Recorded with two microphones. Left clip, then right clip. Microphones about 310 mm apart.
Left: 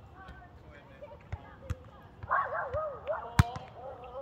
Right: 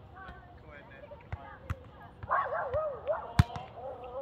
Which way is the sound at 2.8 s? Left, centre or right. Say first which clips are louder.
Right 2 dB; right.